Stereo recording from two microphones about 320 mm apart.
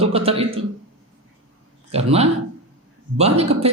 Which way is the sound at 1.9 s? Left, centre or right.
Centre.